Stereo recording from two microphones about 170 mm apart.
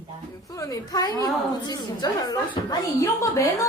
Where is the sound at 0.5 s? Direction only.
20° left (ahead or behind).